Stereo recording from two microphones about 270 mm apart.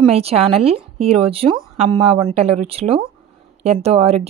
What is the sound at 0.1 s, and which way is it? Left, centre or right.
Speech, right.